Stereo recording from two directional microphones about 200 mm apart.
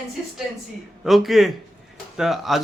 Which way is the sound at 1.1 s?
Centre (ahead or behind).